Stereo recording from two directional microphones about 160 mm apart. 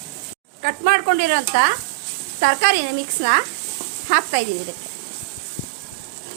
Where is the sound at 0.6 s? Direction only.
65° right (ahead or behind).